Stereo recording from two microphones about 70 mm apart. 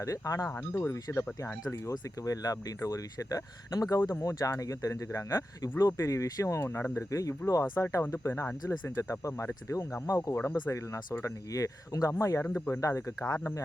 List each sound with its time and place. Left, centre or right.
0.0 s speech: left
0.7 s speech: left
1.6 s speech: left
12.4 s speech: left
12.8 s speech: left